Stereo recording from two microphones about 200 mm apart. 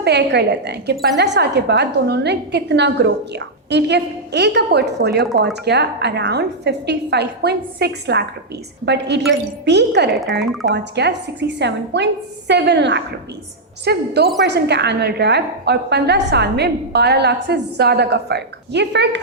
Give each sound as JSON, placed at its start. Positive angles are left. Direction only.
{"t": 0.0, "sound": "a woman's voice", "side_deg": -60}